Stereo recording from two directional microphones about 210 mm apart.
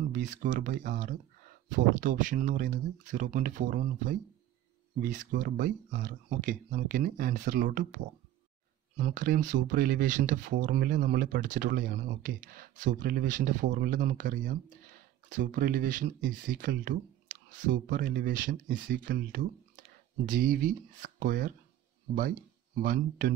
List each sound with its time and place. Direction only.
0.1 s speech: 35° right (ahead or behind)